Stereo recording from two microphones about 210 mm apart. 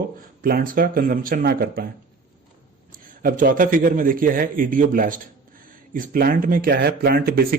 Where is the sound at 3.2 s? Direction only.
40° right (ahead or behind).